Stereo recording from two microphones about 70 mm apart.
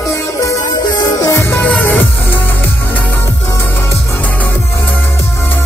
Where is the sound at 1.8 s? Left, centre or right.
Left.